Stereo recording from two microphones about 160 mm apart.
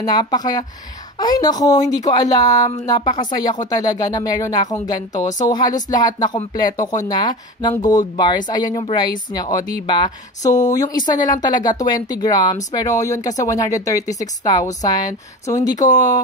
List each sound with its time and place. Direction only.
0.0 s speech: 25° left (ahead or behind)